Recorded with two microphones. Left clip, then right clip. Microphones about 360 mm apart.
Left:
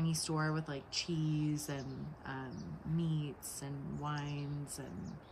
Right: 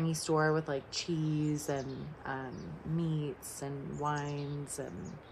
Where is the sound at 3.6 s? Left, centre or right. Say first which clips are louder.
Right 7 dB; centre.